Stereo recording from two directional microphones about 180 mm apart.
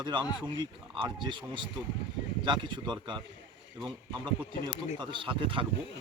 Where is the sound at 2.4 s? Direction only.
25° right (ahead or behind).